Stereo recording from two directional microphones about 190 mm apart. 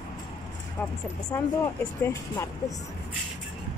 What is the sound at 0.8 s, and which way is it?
Speech, 10° left (ahead or behind).